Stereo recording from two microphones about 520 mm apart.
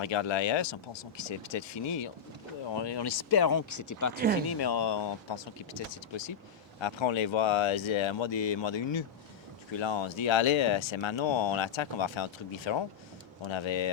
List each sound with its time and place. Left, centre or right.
0.0 s speech: left
4.2 s speech: centre
4.4 s speech: left
6.8 s speech: left